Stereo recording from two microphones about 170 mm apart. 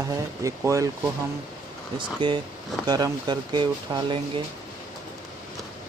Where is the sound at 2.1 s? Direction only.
30° right (ahead or behind).